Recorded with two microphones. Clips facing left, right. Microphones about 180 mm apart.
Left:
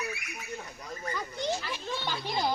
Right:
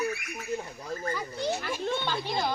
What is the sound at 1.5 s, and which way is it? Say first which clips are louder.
Speech: right 5 dB; 55° right (ahead or behind).